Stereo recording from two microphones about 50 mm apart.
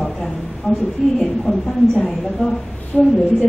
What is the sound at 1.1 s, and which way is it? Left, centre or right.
A woman's voice, centre.